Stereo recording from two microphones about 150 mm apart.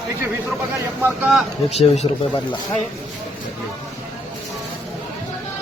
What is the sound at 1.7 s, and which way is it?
Speech, 45° left (ahead or behind).